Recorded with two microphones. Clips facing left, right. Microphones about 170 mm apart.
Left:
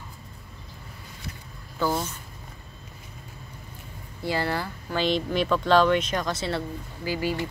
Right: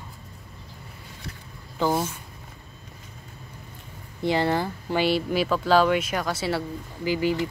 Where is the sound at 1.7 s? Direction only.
20° right (ahead or behind).